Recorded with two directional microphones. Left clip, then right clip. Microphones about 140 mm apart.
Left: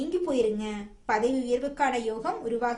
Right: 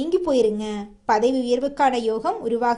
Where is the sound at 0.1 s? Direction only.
50° right (ahead or behind).